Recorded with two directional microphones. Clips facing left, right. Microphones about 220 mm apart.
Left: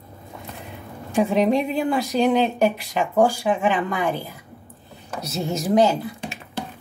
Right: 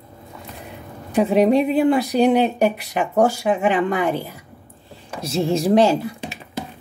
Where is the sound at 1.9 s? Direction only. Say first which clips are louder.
Right 4 dB; 15° right (ahead or behind).